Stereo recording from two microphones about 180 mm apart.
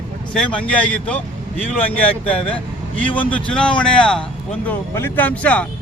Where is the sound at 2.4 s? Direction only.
30° left (ahead or behind).